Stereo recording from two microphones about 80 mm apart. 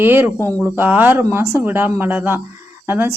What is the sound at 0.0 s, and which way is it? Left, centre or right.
A woman's voice, right.